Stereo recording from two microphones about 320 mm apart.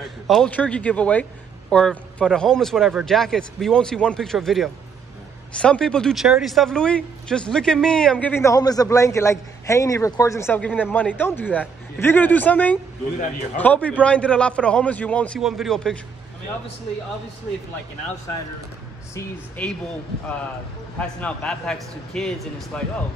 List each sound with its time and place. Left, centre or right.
0.3 s speech: centre
19.1 s speech: centre
21.0 s speech: centre